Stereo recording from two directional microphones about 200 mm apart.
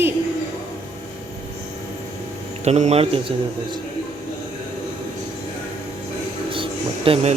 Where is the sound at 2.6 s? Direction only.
35° right (ahead or behind).